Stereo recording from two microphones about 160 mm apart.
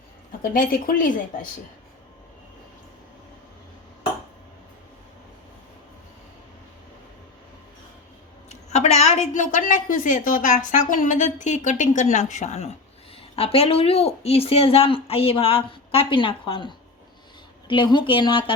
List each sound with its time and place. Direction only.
0.4 s speech: 60° left (ahead or behind)
8.4 s a woman's voice: 45° left (ahead or behind)